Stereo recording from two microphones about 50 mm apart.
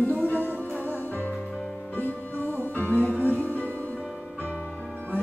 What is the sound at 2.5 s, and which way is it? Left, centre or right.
Music, left.